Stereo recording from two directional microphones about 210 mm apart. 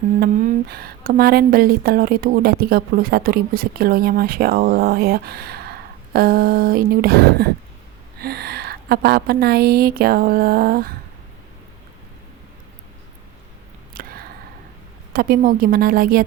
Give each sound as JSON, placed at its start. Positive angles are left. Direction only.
{"t": 0.2, "sound": "speech", "side_deg": -45}
{"t": 13.9, "sound": "a sound", "side_deg": -45}
{"t": 15.1, "sound": "speech", "side_deg": -45}